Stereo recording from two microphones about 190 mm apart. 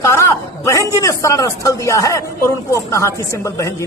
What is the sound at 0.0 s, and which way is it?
A man's voice, 15° left (ahead or behind).